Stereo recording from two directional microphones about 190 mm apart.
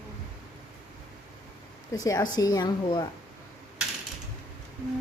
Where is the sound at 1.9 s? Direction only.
20° left (ahead or behind).